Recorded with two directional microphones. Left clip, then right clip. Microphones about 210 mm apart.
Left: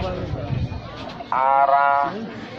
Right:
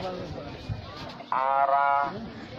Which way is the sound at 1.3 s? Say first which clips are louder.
Left 7 dB; 25° right (ahead or behind).